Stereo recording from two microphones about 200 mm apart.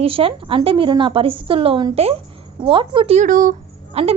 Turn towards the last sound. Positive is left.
turn(degrees=-30)  # may be behind; listen again after turning